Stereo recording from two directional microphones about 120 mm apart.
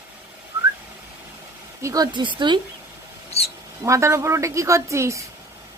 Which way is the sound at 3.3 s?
60° left (ahead or behind).